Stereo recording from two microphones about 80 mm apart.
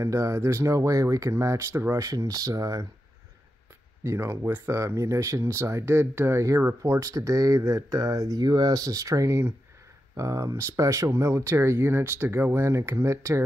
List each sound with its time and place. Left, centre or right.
0.0 s speech: right
2.0 s speech: right
4.0 s speech: right